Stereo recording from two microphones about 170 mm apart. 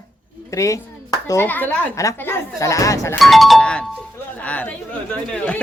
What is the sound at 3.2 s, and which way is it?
Speech, centre (ahead or behind).